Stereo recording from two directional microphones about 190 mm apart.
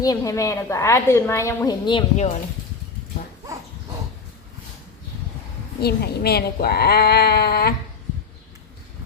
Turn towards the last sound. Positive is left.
turn(degrees=60)  # may be behind; listen again after turning